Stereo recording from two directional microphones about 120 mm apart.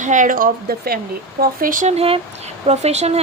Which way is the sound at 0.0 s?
90° right.